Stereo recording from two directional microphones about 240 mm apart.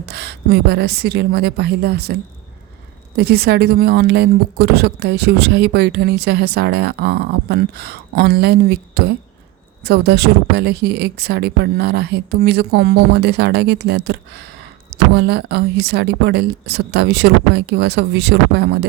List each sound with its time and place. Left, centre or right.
0.0 s a woman's voice: right
3.2 s a woman's voice: right